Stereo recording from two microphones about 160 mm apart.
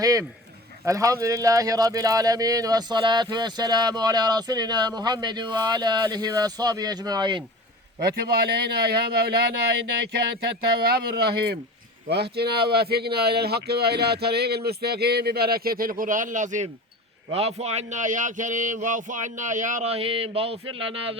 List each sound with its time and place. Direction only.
0.0 s speech: 20° right (ahead or behind)
7.9 s speech: 75° right (ahead or behind)
10.8 s speech: 75° right (ahead or behind); by 16.6 s 50° right (ahead or behind)
17.3 s speech: 40° right (ahead or behind)
19.9 s a sound: 35° right (ahead or behind)